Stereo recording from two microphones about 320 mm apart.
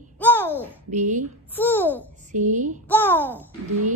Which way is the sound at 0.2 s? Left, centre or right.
Centre.